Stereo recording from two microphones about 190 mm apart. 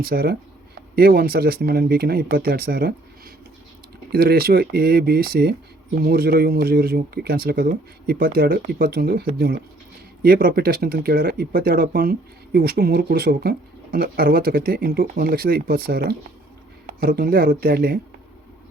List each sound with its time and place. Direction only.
0.0 s speech: 50° right (ahead or behind)
10.2 s speech: 50° right (ahead or behind)